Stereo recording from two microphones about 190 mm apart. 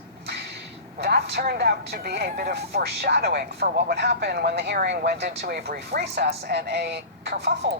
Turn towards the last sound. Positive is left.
turn(degrees=-60)  # may be behind; listen again after turning